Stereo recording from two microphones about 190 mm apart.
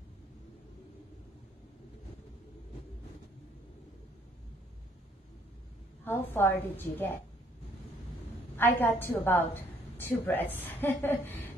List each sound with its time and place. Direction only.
6.3 s a woman's voice: 10° left (ahead or behind)
8.5 s a woman's voice: 10° left (ahead or behind)